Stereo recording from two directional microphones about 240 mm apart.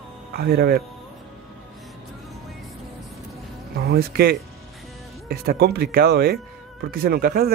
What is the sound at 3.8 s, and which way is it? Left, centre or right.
Speech, right.